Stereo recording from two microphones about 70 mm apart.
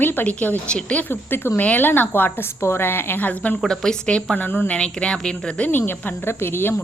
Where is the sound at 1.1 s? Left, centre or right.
Left.